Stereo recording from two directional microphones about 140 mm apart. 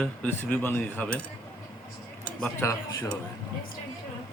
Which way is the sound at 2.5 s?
20° left (ahead or behind).